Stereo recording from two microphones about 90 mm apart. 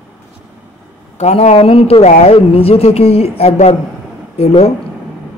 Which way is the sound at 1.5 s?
90° left.